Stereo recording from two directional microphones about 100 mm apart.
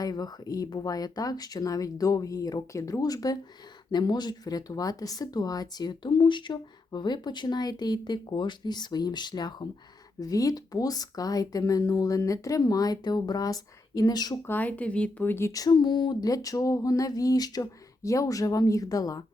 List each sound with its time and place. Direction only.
0.0 s speech: 40° left (ahead or behind)
14.4 s speech: 20° left (ahead or behind)
15.5 s speech: 45° left (ahead or behind)